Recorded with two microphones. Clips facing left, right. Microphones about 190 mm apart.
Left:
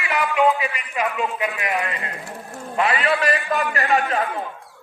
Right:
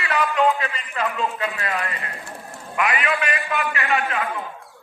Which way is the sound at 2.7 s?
30° left (ahead or behind).